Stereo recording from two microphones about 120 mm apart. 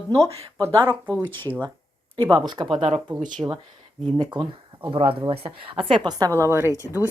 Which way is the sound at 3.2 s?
90° right.